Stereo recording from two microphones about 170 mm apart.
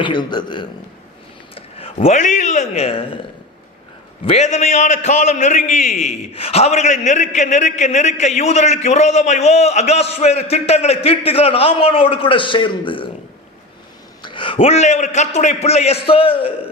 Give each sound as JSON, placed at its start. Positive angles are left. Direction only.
{"t": 0.0, "sound": "a man's voice", "side_deg": 25}
{"t": 4.3, "sound": "a man's voice", "side_deg": 40}
{"t": 14.2, "sound": "a man's voice", "side_deg": 30}